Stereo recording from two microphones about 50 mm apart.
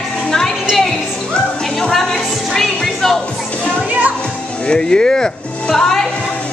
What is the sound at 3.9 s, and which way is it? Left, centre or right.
Music, right.